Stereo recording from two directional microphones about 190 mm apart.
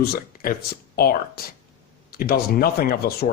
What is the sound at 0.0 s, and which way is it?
Speech, 50° left (ahead or behind).